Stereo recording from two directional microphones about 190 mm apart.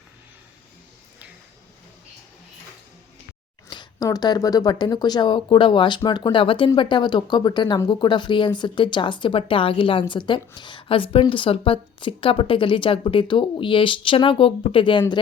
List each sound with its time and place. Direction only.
3.7 s speech: 20° left (ahead or behind)